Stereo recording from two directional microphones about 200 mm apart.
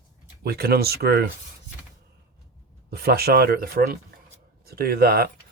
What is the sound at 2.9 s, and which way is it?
Speech, 50° right (ahead or behind).